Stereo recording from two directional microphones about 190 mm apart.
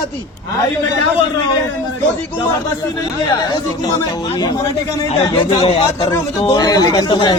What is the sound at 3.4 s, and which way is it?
A man's voice, 20° left (ahead or behind).